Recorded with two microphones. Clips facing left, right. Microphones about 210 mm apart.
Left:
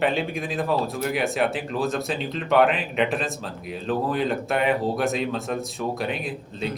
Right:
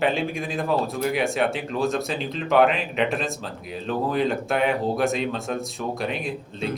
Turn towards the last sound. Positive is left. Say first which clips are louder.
# right 1 dB
turn(degrees=0)  # may be behind; listen again after turning